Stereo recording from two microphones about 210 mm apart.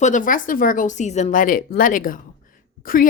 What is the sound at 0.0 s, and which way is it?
Speech, 40° left (ahead or behind).